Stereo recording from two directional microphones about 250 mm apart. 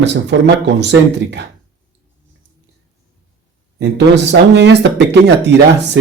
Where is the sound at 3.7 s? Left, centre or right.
Right.